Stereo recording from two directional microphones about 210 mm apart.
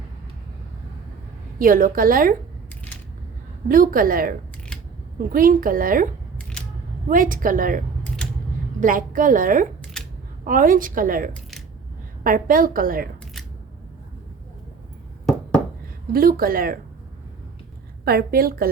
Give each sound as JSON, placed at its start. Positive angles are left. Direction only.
{"t": 1.5, "sound": "a woman's voice", "side_deg": -40}
{"t": 3.7, "sound": "a woman's voice", "side_deg": -40}
{"t": 7.1, "sound": "a woman's voice", "side_deg": -40}
{"t": 16.1, "sound": "a woman's voice", "side_deg": -45}
{"t": 18.0, "sound": "a woman's voice", "side_deg": -45}